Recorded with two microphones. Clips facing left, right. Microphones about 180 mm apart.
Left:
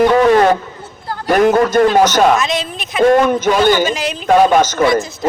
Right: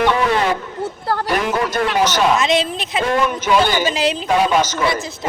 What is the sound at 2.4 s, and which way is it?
Speech, 30° right (ahead or behind).